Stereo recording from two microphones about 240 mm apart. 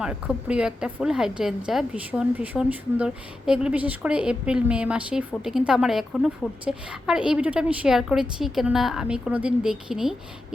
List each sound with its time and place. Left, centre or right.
0.0 s a woman's voice: centre